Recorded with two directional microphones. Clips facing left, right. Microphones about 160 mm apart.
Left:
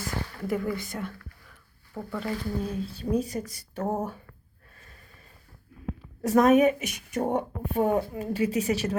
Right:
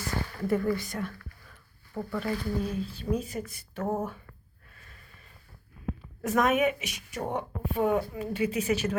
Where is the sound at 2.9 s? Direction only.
35° left (ahead or behind).